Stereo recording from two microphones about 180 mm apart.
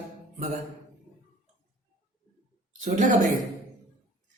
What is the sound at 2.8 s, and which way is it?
Speech, 45° right (ahead or behind).